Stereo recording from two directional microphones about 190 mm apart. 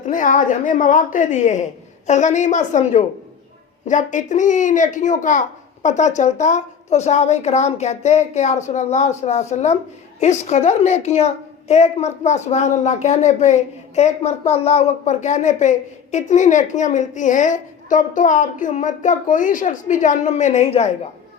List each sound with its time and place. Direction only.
0.0 s a woman's voice: 40° left (ahead or behind)